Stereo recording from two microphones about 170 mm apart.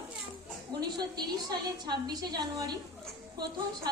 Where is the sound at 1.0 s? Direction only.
25° right (ahead or behind).